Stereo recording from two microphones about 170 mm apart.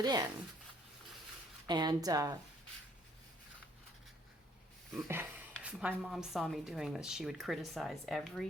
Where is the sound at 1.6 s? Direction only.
25° right (ahead or behind).